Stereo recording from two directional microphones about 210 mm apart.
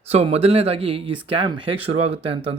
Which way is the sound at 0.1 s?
30° right (ahead or behind).